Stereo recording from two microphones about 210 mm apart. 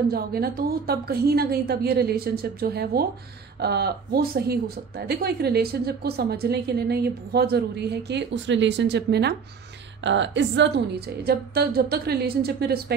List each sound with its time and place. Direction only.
0.1 s speech: 45° right (ahead or behind)